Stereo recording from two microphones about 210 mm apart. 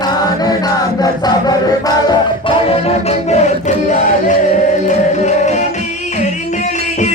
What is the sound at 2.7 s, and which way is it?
Music, 30° left (ahead or behind).